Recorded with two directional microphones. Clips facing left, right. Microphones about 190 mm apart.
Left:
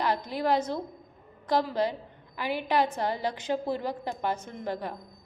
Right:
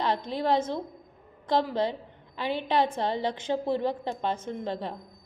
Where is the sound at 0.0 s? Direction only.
25° right (ahead or behind).